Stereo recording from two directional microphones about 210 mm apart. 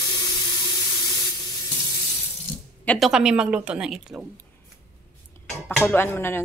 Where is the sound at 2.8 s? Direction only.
5° left (ahead or behind).